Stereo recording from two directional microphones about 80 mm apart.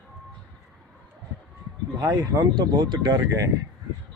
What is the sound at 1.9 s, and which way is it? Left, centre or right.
Speech, right.